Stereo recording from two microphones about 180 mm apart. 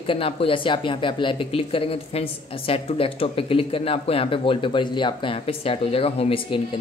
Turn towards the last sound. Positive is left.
turn(degrees=30)  # may be behind; listen again after turning